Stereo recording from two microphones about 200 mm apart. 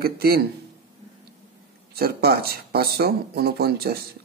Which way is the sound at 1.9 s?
50° right (ahead or behind).